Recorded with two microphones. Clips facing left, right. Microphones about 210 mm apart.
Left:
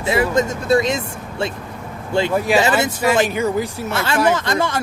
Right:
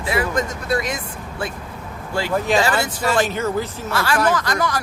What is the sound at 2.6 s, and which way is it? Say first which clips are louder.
Speech: left 3 dB; 20° left (ahead or behind).